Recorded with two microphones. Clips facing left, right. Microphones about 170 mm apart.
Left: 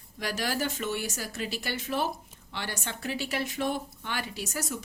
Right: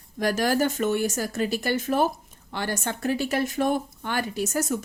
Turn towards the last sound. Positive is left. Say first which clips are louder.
# right 9 dB
turn(degrees=-50)  # may be behind; listen again after turning